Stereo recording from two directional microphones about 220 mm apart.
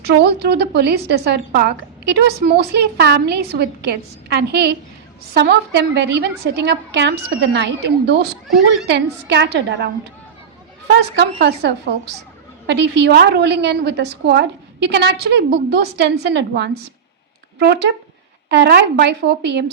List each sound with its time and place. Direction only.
0.0 s speech: 50° right (ahead or behind)
11.2 s speech: 50° right (ahead or behind)